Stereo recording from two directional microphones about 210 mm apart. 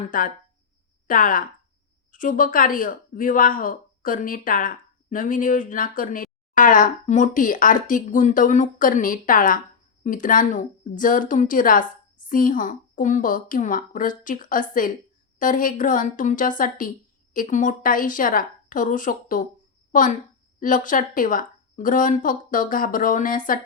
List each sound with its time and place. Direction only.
0.1 s speech: 40° left (ahead or behind)